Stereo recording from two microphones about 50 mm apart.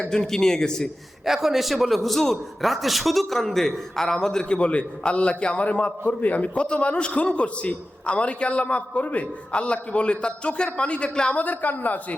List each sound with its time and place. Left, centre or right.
0.1 s a man's voice: centre
1.2 s a man's voice: centre
11.3 s a woman's voice: left